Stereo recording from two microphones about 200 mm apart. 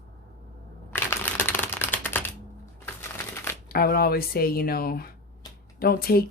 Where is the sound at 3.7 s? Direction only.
50° left (ahead or behind).